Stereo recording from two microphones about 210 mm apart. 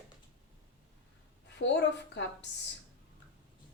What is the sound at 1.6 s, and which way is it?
Speech, 55° left (ahead or behind).